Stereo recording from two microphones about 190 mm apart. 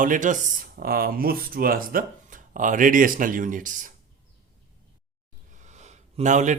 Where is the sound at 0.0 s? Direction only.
45° right (ahead or behind).